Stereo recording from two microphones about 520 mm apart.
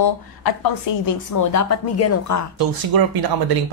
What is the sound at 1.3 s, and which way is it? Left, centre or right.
Speech, left.